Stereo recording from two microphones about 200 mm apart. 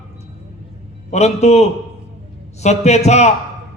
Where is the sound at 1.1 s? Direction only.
35° left (ahead or behind).